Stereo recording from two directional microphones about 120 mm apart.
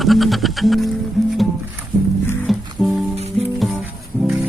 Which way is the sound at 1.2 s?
Centre (ahead or behind).